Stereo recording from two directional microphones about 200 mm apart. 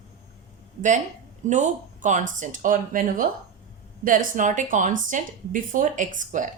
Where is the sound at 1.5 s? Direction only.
35° right (ahead or behind).